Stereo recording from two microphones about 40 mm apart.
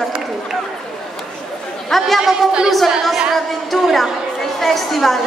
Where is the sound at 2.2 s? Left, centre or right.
Right.